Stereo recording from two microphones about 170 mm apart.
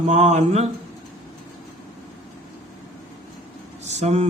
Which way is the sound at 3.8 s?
40° right (ahead or behind).